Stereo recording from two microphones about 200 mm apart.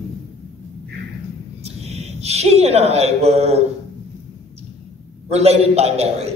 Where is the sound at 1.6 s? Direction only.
30° right (ahead or behind).